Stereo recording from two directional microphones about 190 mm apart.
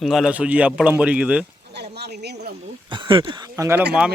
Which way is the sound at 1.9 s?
60° right (ahead or behind).